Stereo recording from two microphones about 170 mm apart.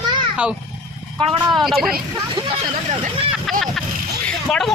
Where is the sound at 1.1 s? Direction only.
30° right (ahead or behind).